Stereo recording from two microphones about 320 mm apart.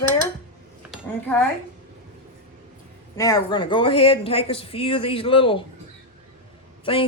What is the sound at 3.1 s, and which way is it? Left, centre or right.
Speech, centre.